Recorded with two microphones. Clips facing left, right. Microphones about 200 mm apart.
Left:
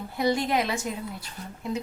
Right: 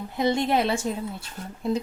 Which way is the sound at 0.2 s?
25° right (ahead or behind).